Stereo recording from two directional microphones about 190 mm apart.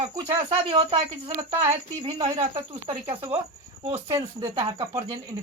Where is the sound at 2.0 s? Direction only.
25° right (ahead or behind).